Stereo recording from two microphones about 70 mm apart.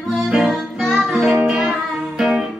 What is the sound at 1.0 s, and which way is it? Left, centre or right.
Music, centre.